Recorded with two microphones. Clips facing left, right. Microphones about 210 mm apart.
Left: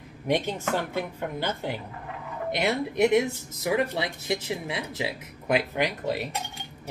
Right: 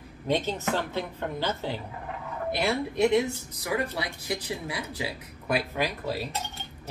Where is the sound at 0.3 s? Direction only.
15° left (ahead or behind).